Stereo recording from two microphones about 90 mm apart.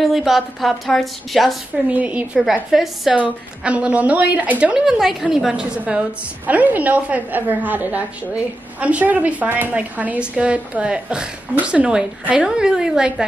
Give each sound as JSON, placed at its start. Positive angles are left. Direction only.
{"t": 0.0, "sound": "a woman's voice", "side_deg": 0}
{"t": 1.9, "sound": "a woman's voice", "side_deg": -15}
{"t": 2.7, "sound": "a woman's voice", "side_deg": -5}
{"t": 3.2, "sound": "a woman's voice", "side_deg": -15}